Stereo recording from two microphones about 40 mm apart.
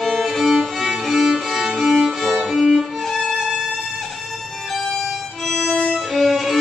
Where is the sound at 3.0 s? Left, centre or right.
Centre.